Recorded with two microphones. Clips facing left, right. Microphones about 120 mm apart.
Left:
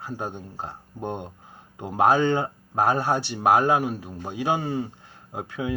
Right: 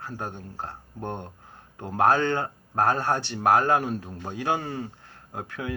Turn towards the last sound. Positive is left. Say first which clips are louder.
# left 4 dB
turn(degrees=15)  # may be behind; listen again after turning